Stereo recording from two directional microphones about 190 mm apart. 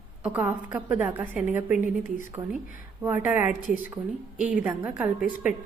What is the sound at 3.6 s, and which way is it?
Speech, 45° left (ahead or behind).